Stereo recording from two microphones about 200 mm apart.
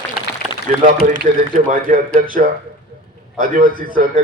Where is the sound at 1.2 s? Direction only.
40° right (ahead or behind).